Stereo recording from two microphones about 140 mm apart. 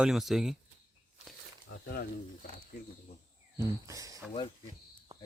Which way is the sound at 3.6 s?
25° right (ahead or behind).